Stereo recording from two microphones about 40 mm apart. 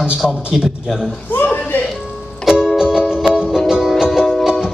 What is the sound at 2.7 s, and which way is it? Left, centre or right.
Music, centre.